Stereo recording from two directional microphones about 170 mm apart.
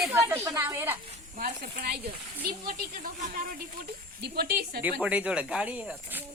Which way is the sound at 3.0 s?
55° right (ahead or behind).